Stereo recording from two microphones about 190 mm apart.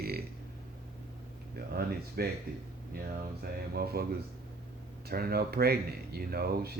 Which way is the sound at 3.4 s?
55° right (ahead or behind).